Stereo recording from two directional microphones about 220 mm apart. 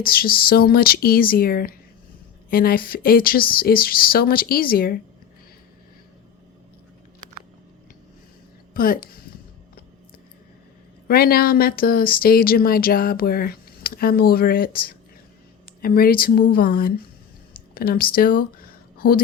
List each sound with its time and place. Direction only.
0.0 s speech: 40° left (ahead or behind)
8.7 s speech: 40° left (ahead or behind)
11.1 s speech: 45° left (ahead or behind)